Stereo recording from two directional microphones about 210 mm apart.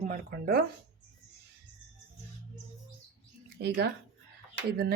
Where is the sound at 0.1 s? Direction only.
45° right (ahead or behind).